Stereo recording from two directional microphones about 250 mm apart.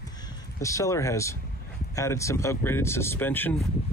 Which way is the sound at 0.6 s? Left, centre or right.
Centre.